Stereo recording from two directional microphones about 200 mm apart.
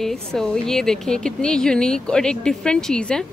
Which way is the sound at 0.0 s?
Centre (ahead or behind).